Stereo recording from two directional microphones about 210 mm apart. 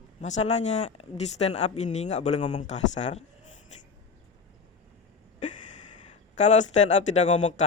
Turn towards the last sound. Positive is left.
turn(degrees=35)  # may be behind; listen again after turning